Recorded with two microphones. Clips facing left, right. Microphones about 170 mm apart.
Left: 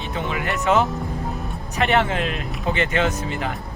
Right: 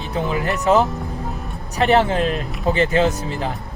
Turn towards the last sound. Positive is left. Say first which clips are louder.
# right 3 dB
turn(degrees=-35)  # may be behind; listen again after turning